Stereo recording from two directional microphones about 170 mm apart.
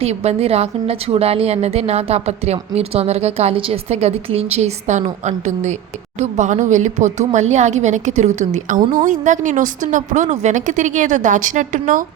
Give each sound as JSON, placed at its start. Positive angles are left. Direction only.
{"t": 0.0, "sound": "a woman's voice", "side_deg": -40}